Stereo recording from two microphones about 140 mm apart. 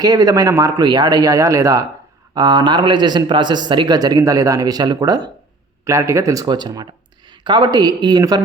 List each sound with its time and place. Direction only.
0.0 s speech: 25° right (ahead or behind)